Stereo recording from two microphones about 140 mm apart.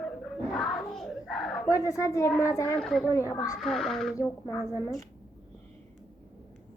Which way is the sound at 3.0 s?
25° left (ahead or behind).